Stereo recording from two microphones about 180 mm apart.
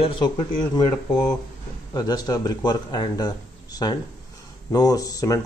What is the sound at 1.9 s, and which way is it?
Speech, 20° left (ahead or behind).